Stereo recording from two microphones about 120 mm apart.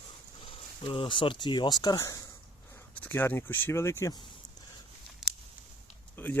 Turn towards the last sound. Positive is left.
turn(degrees=15)  # may be behind; listen again after turning